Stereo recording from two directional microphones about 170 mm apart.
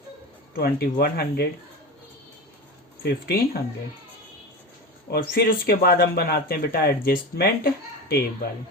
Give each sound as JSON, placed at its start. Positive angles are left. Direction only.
{"t": 0.5, "sound": "speech", "side_deg": 65}
{"t": 3.0, "sound": "speech", "side_deg": 65}
{"t": 5.1, "sound": "speech", "side_deg": 60}